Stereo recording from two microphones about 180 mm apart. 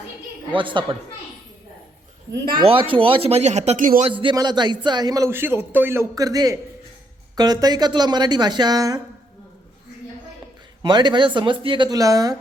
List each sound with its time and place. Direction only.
0.5 s a man's voice: 25° right (ahead or behind)
2.6 s speech: 30° right (ahead or behind); by 4.0 s 45° right (ahead or behind)
4.0 s a man's voice: 30° right (ahead or behind)
10.8 s a man's voice: 25° right (ahead or behind)